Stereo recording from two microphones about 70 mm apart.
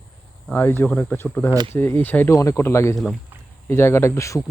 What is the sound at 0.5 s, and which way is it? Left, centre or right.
Speech, left.